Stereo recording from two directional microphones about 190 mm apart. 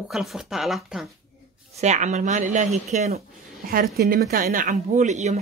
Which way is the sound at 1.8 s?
40° right (ahead or behind).